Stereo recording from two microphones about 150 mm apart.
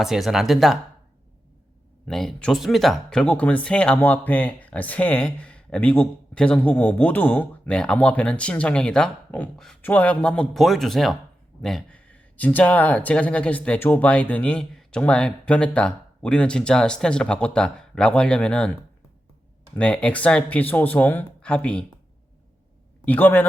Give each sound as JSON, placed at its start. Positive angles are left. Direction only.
{"t": 0.0, "sound": "speech", "side_deg": 0}
{"t": 2.0, "sound": "speech", "side_deg": 5}
{"t": 19.7, "sound": "speech", "side_deg": 10}
{"t": 23.0, "sound": "speech", "side_deg": 10}